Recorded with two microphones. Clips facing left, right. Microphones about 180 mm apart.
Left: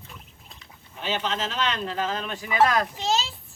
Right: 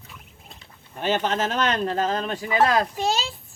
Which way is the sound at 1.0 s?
50° right (ahead or behind).